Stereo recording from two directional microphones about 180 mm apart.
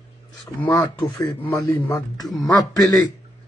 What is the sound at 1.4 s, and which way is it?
A man's voice, 10° left (ahead or behind).